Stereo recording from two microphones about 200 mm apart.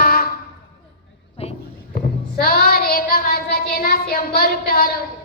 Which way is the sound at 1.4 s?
30° left (ahead or behind).